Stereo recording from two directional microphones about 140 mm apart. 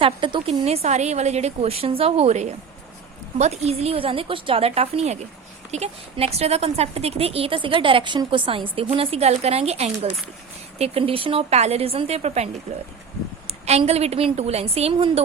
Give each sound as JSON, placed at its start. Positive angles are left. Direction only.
{"t": 0.0, "sound": "a woman's voice", "side_deg": -35}
{"t": 13.5, "sound": "a woman's voice", "side_deg": -50}